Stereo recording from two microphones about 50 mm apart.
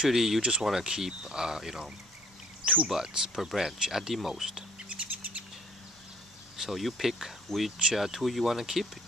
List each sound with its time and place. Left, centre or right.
0.0 s speech: centre
0.4 s speech: centre
2.6 s speech: right
2.9 s speech: centre
4.8 s bird: right
6.5 s speech: centre